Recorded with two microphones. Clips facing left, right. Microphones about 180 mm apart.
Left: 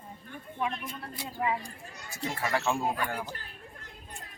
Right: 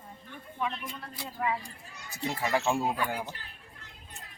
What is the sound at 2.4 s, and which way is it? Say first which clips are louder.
Speech: right 1 dB; 20° right (ahead or behind).